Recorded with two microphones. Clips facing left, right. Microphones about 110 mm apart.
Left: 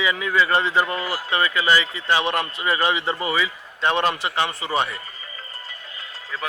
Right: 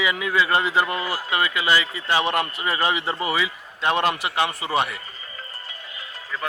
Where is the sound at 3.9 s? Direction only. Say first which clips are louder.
Even; 40° right (ahead or behind).